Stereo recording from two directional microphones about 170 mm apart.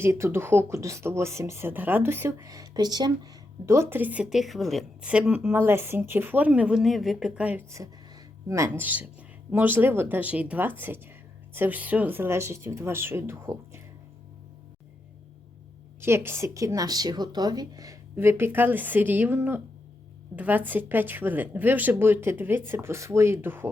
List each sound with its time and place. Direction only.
0.0 s a woman's voice: 15° right (ahead or behind)
16.0 s a woman's voice: 15° right (ahead or behind)